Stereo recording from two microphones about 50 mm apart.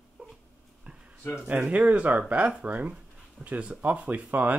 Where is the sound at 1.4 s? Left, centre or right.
Right.